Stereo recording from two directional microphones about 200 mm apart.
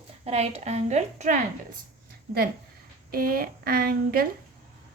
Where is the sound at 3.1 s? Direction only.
45° right (ahead or behind).